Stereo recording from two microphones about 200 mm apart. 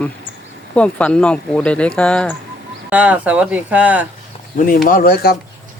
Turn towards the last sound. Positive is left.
turn(degrees=50)  # may be behind; listen again after turning